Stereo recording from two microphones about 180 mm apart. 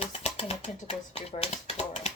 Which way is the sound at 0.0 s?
35° left (ahead or behind).